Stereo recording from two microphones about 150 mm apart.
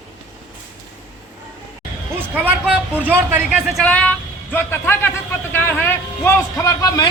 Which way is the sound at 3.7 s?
10° left (ahead or behind).